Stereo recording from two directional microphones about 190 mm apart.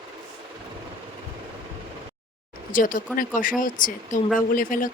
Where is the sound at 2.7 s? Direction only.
45° left (ahead or behind).